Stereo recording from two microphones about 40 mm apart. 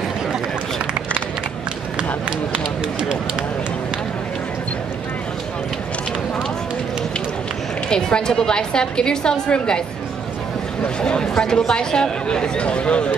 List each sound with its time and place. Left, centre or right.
2.5 s run: right
7.9 s speech: centre
11.0 s speech: left